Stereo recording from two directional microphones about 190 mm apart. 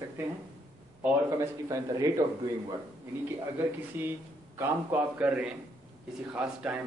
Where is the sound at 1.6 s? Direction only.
15° right (ahead or behind).